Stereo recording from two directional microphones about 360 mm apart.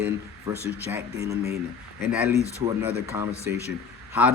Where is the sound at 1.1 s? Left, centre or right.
Right.